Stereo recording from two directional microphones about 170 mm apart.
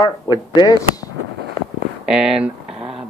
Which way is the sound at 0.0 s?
25° left (ahead or behind).